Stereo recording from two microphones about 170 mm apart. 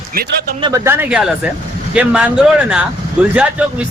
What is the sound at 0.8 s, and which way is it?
A man's voice, 10° right (ahead or behind).